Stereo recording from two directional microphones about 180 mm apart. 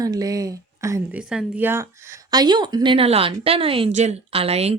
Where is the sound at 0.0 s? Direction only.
20° right (ahead or behind).